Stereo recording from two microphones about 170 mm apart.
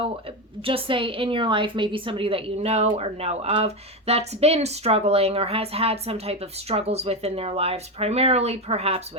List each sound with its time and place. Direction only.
0.6 s a woman's voice: 30° right (ahead or behind)